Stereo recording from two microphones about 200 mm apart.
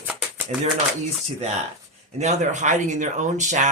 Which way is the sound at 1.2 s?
35° right (ahead or behind).